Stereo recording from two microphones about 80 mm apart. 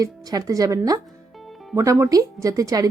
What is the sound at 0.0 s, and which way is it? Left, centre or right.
A woman's voice, right.